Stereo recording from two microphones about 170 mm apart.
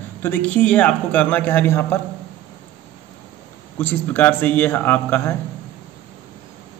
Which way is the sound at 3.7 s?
10° left (ahead or behind).